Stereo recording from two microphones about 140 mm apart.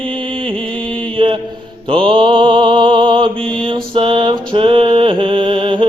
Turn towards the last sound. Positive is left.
turn(degrees=-40)  # may be behind; listen again after turning